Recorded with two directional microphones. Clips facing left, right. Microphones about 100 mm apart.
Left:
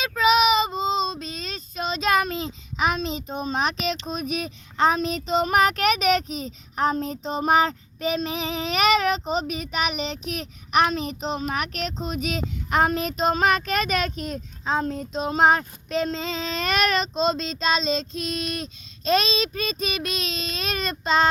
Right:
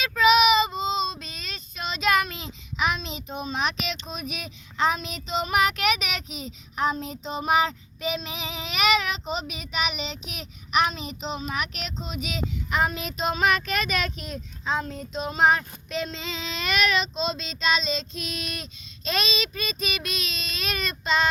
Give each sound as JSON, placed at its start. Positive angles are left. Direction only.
{"t": 0.0, "sound": "child singing", "side_deg": 25}
{"t": 4.0, "sound": "speech", "side_deg": 40}